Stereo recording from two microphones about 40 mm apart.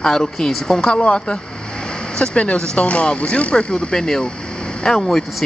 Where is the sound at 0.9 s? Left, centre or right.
Left.